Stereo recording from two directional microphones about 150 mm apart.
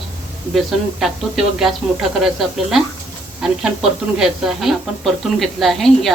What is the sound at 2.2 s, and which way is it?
Speech, centre (ahead or behind).